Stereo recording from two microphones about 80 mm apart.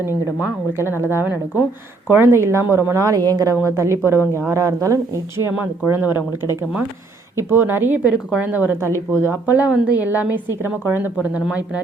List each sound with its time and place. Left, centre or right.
0.7 s a woman's voice: right
3.1 s speech: right
3.5 s a woman's voice: right
5.5 s a woman's voice: right
6.1 s speech: left
7.3 s a woman's voice: right